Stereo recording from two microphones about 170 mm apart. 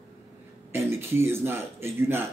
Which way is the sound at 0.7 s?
15° right (ahead or behind).